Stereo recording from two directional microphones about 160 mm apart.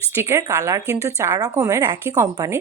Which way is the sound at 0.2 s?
15° right (ahead or behind).